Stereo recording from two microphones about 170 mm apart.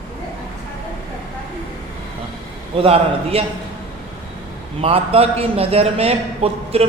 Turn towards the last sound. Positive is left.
turn(degrees=-35)  # may be behind; listen again after turning